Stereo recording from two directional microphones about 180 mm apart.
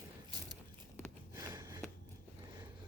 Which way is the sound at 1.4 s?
20° right (ahead or behind).